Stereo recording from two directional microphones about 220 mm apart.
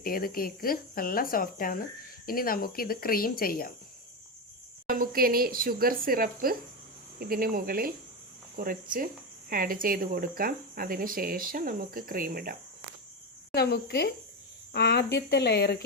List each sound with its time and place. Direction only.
0.0 s speech: 40° left (ahead or behind)
4.9 s speech: 40° right (ahead or behind)
13.5 s speech: 45° left (ahead or behind)